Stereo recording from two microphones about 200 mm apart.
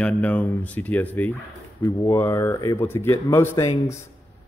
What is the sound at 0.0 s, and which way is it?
A man's voice, 10° left (ahead or behind).